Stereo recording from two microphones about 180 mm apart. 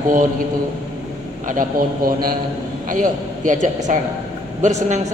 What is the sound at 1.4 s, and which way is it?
A man's voice, 50° right (ahead or behind).